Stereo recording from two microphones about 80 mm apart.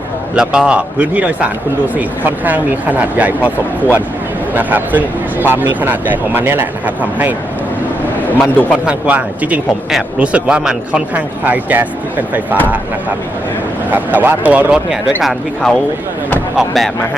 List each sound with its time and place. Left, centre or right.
0.3 s a man's voice: centre
8.2 s a man's voice: left
8.9 s a man's voice: centre
13.9 s speech: right
15.2 s speech: centre